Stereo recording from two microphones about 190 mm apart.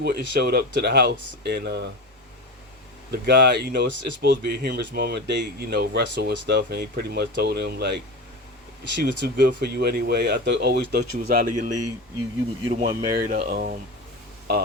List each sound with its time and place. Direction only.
0.0 s speech: 55° right (ahead or behind)
3.1 s speech: 60° right (ahead or behind); by 13.0 s 35° right (ahead or behind)
13.1 s speech: 50° right (ahead or behind)